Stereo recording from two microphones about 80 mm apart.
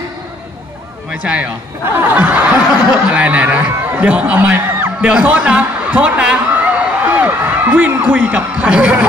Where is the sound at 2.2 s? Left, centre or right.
Centre.